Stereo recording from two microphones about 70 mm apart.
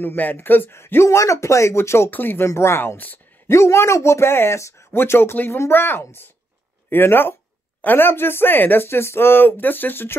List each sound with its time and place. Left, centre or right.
0.0 s speech: left
1.0 s speech: left
2.0 s speech: left